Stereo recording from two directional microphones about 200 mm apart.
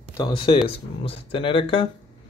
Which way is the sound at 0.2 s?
25° left (ahead or behind).